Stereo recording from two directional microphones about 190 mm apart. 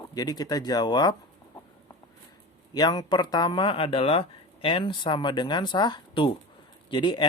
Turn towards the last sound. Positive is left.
turn(degrees=25)  # may be behind; listen again after turning